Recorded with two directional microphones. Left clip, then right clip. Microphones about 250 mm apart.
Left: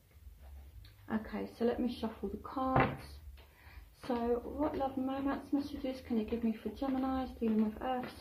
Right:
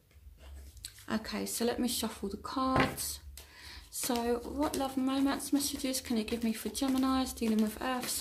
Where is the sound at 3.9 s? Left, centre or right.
Right.